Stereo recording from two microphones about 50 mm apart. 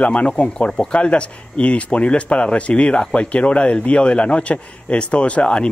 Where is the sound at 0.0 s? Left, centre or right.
Left.